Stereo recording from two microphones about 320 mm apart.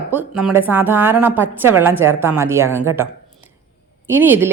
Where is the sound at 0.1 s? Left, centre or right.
Centre.